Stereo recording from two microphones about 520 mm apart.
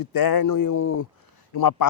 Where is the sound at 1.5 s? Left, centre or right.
Left.